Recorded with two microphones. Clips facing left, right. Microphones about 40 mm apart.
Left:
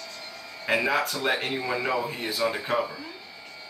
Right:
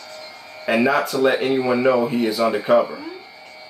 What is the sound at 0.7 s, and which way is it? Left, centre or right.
Speech, centre.